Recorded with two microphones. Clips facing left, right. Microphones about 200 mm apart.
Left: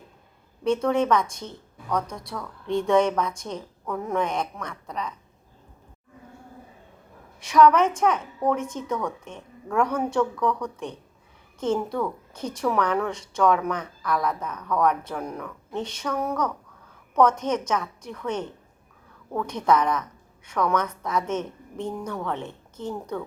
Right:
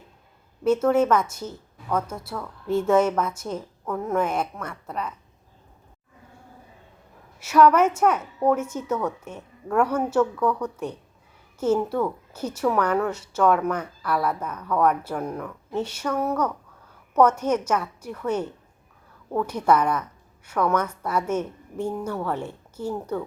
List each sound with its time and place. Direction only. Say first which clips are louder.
0.6 s a woman's voice: right 3 dB; 5° right (ahead or behind)
7.3 s a woman's voice: even; 5° right (ahead or behind)